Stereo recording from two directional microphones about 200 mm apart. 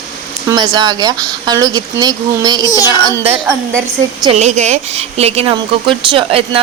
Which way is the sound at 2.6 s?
20° left (ahead or behind).